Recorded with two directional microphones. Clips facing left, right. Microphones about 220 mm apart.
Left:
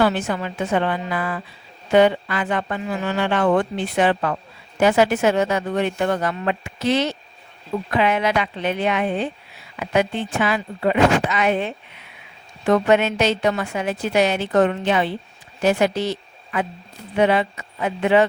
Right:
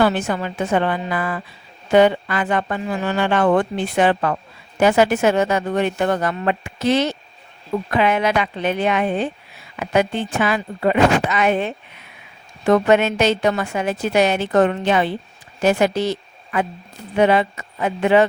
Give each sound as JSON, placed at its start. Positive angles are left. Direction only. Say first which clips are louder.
{"t": 0.0, "sound": "a woman's voice", "louder": "right 2 dB", "side_deg": -45}